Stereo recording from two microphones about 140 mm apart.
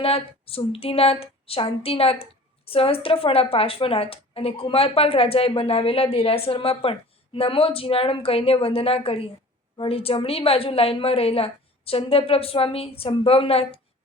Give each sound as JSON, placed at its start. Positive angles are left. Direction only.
{"t": 0.0, "sound": "speech", "side_deg": 45}